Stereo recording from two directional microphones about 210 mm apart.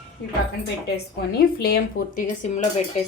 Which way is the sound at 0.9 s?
50° left (ahead or behind).